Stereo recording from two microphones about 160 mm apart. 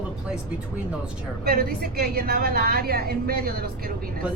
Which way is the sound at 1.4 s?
80° right.